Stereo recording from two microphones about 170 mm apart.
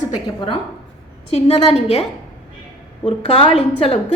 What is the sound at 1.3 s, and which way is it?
A woman's voice, 40° left (ahead or behind).